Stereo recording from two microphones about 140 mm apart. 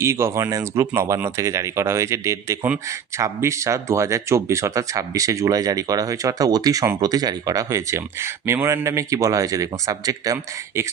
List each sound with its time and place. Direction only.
0.0 s speech: 20° right (ahead or behind)